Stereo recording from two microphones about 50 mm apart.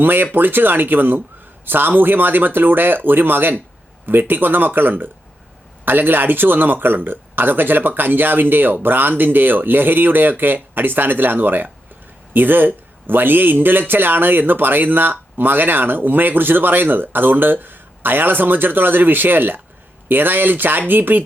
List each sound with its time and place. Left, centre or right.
0.0 s a man's voice: right